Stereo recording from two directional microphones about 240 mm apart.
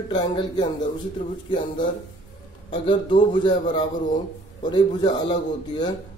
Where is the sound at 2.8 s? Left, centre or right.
Centre.